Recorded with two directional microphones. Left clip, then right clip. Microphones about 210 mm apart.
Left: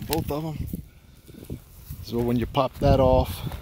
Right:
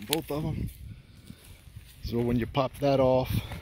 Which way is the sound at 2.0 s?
Centre (ahead or behind).